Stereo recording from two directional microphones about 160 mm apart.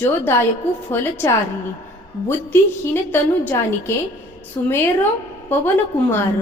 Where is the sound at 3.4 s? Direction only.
15° left (ahead or behind).